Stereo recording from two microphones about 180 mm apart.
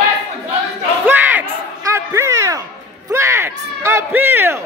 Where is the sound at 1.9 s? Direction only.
15° right (ahead or behind).